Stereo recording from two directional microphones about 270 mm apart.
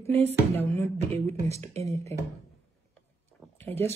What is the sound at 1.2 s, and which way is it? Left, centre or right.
Speech, right.